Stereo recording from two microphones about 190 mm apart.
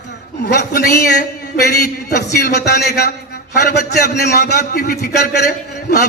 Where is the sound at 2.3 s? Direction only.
60° left (ahead or behind).